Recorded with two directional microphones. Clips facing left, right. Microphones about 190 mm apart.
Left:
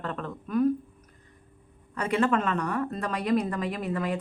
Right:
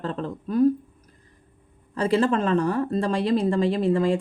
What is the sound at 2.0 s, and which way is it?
Speech, 30° right (ahead or behind).